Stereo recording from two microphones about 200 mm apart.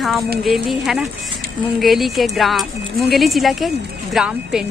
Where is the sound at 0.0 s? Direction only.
Centre (ahead or behind).